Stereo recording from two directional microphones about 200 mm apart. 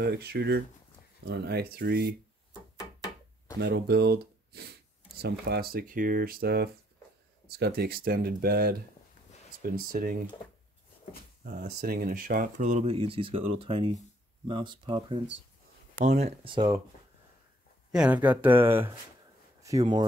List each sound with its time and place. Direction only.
0.0 s speech: 50° right (ahead or behind)
3.6 s speech: 55° right (ahead or behind)
11.4 s speech: 45° right (ahead or behind); by 15.1 s 25° right (ahead or behind)
15.9 s speech: 40° right (ahead or behind); by 16.8 s 20° right (ahead or behind)
17.9 s speech: 5° right (ahead or behind)